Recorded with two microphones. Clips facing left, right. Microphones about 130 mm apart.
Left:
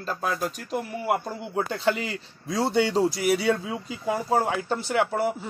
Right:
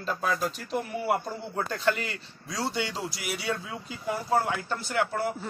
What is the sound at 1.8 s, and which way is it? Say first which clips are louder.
Speech: left 1 dB; 15° left (ahead or behind).